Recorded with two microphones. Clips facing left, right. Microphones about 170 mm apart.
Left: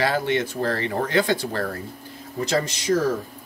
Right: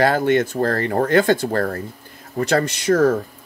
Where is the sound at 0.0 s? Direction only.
50° right (ahead or behind).